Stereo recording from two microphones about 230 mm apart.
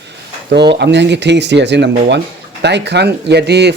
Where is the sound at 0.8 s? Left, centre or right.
Right.